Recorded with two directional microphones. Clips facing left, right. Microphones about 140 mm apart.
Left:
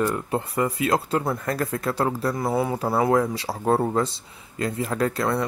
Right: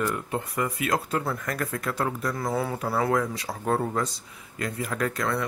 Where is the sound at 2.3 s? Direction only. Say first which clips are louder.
Left 4 dB; 20° left (ahead or behind).